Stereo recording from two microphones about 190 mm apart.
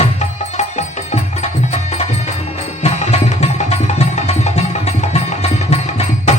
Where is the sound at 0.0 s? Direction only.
35° left (ahead or behind).